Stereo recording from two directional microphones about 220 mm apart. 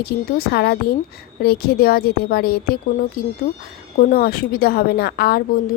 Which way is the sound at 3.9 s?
40° left (ahead or behind).